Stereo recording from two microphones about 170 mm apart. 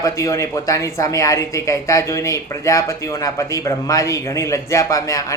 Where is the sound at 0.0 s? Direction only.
15° left (ahead or behind).